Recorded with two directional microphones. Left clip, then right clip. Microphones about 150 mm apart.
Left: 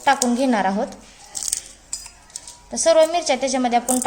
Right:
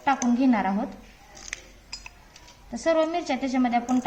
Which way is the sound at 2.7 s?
75° left (ahead or behind).